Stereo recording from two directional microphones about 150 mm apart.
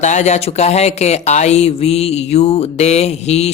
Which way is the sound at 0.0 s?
50° left (ahead or behind).